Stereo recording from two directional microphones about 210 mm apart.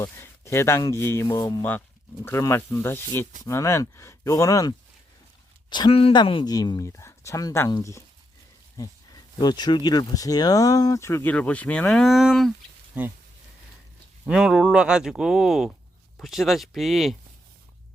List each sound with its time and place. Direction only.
0.0 s speech: 15° left (ahead or behind)
5.7 s speech: 25° left (ahead or behind)
9.4 s speech: 20° left (ahead or behind); by 13.1 s 5° right (ahead or behind)
14.3 s speech: 5° right (ahead or behind)